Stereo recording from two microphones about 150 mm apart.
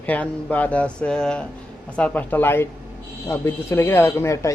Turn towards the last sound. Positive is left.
turn(degrees=20)  # may be behind; listen again after turning